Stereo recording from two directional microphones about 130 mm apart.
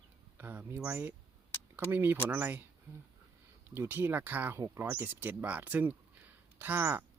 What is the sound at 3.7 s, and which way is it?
Speech, 15° right (ahead or behind).